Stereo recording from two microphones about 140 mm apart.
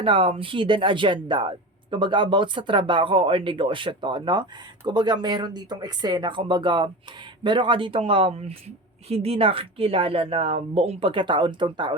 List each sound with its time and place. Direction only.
0.0 s speech: 40° right (ahead or behind)